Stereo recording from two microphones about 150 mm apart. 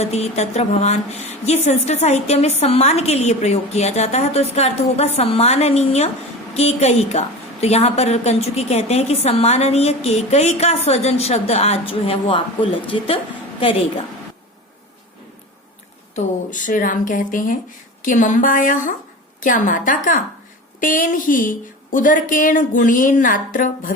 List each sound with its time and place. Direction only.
0.0 s a woman's voice: 45° left (ahead or behind)
16.1 s a woman's voice: 60° left (ahead or behind)